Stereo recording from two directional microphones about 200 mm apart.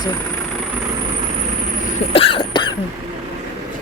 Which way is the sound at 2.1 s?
25° left (ahead or behind).